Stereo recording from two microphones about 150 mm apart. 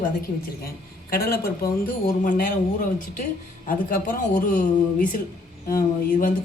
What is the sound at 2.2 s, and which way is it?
Speech, 60° left (ahead or behind).